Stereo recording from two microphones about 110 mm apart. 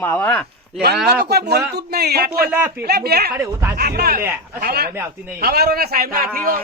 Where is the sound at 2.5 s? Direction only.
20° right (ahead or behind).